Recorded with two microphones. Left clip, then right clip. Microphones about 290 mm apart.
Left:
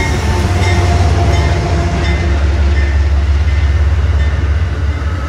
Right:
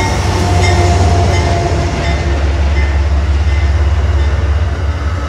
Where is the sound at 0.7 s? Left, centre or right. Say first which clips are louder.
Right 3 dB; right.